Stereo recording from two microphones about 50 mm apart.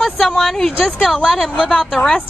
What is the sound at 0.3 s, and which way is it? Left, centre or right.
A woman's voice, centre.